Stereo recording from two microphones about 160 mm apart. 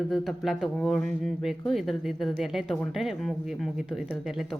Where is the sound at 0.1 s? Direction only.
Centre (ahead or behind).